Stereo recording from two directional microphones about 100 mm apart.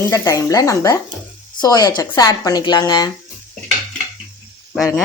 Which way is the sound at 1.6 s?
45° left (ahead or behind).